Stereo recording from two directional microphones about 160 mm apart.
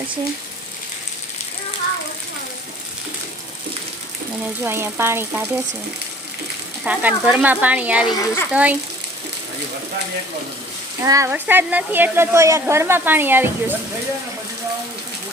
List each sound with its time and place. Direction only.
4.6 s speech: 15° right (ahead or behind)
6.8 s speech: 10° right (ahead or behind)
8.1 s a child's voice: 20° left (ahead or behind)
8.5 s speech: 10° right (ahead or behind)
11.0 s speech: 20° right (ahead or behind)